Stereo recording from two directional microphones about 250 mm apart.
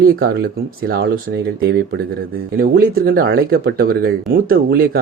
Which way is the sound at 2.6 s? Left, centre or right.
Right.